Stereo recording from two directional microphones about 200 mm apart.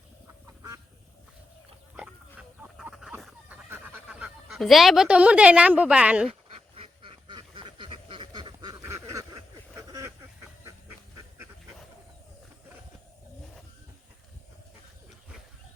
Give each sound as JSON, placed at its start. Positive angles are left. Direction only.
{"t": 2.6, "sound": "fowl", "side_deg": -5}
{"t": 3.7, "sound": "speech", "side_deg": -10}
{"t": 6.7, "sound": "duck", "side_deg": -25}